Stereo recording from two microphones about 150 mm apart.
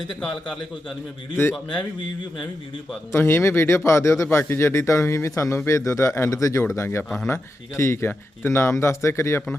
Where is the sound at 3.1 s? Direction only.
15° left (ahead or behind).